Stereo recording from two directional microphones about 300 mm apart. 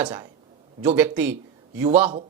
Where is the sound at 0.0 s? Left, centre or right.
Centre.